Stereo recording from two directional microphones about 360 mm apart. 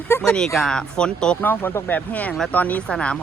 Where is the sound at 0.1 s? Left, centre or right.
Centre.